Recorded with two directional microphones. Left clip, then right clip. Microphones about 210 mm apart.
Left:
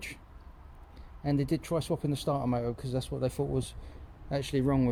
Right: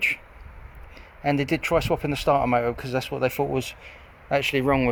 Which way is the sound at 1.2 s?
Centre (ahead or behind).